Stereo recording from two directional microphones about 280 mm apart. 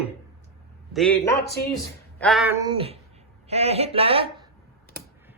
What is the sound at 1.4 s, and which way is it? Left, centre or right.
Speech, left.